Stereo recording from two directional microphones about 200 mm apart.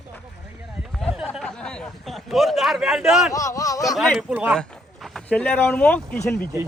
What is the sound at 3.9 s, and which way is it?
Speech, centre (ahead or behind).